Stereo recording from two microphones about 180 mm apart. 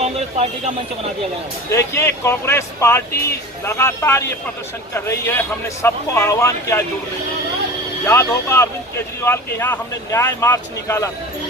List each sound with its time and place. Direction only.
0.0 s a sound: 35° right (ahead or behind)
2.0 s speech: 15° left (ahead or behind)
8.0 s speech: 15° left (ahead or behind)